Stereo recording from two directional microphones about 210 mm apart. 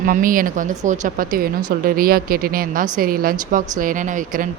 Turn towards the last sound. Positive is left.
turn(degrees=-40)  # may be behind; listen again after turning